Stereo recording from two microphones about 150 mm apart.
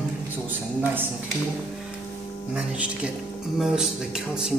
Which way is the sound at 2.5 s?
10° right (ahead or behind).